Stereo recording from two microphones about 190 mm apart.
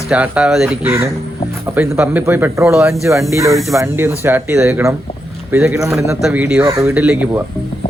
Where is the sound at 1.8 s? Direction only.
10° right (ahead or behind).